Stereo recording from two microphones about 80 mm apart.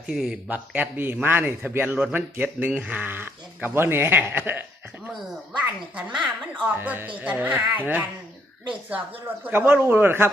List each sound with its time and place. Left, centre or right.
0.1 s a man's voice: centre
9.4 s a man's voice: right